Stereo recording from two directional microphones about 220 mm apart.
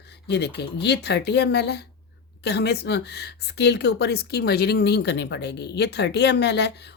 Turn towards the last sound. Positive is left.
turn(degrees=50)  # may be behind; listen again after turning